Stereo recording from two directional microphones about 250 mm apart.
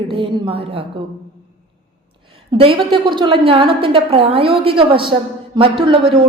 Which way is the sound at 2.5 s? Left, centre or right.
Right.